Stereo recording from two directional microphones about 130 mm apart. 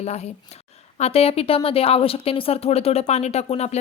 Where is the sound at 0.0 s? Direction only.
55° left (ahead or behind).